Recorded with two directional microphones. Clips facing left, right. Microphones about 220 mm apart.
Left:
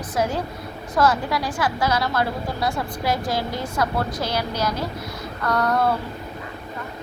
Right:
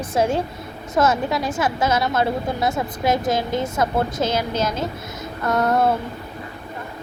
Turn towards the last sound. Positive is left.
turn(degrees=-25)  # may be behind; listen again after turning